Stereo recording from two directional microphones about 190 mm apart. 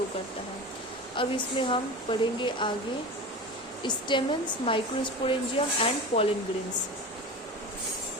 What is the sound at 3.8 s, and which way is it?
Speech, 25° left (ahead or behind).